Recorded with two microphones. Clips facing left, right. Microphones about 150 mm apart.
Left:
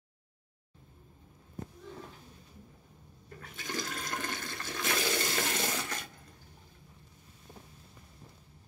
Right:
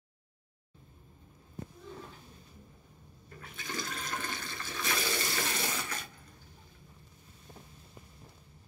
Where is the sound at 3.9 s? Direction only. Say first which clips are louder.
Left 1 dB; 45° left (ahead or behind).